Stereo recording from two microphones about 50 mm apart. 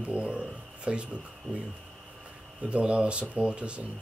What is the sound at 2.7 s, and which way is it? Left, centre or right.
Speech, right.